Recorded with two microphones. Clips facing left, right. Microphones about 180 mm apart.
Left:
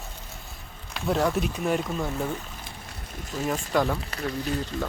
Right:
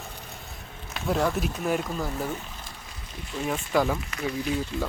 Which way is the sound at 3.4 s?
Centre (ahead or behind).